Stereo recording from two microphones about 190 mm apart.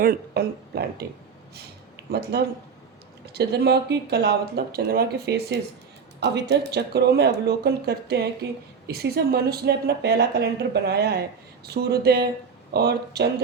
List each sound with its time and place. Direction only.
0.0 s speech: 50° right (ahead or behind)
2.0 s speech: 55° right (ahead or behind)